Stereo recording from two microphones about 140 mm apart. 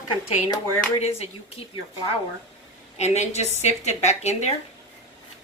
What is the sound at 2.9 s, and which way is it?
A woman's voice, 50° left (ahead or behind).